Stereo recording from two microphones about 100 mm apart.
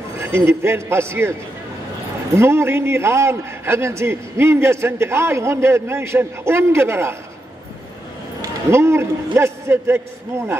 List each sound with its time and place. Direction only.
0.2 s a man's voice: 25° right (ahead or behind)
2.3 s a man's voice: 25° right (ahead or behind)
8.4 s a man's voice: 25° right (ahead or behind)